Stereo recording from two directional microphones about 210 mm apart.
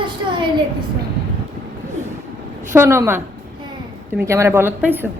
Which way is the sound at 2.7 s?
10° right (ahead or behind).